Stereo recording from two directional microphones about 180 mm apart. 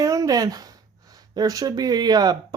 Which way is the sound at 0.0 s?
20° right (ahead or behind).